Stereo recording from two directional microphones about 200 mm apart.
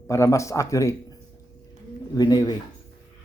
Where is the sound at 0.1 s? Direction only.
15° left (ahead or behind).